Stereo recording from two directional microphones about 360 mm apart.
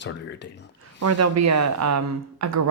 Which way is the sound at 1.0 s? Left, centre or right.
Right.